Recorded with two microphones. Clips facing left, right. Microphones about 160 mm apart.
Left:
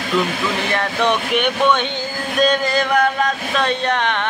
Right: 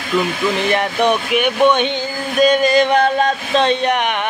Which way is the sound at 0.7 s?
15° right (ahead or behind).